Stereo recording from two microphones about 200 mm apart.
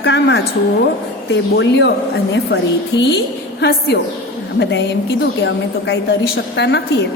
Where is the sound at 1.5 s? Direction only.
60° left (ahead or behind).